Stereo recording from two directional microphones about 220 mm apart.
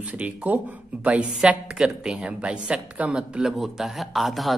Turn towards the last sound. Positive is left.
turn(degrees=0)  # may be behind; listen again after turning